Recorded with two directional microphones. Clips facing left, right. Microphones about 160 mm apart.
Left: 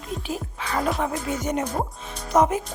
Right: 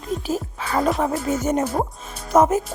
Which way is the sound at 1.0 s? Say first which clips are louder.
Right 5 dB; 40° right (ahead or behind).